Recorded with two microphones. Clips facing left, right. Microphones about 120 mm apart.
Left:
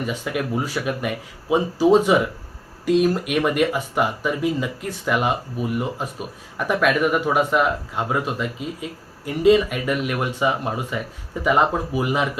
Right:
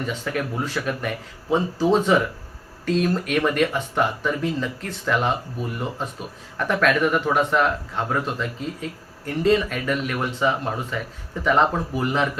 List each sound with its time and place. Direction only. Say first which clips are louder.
0.0 s speech: left 1 dB; 10° left (ahead or behind)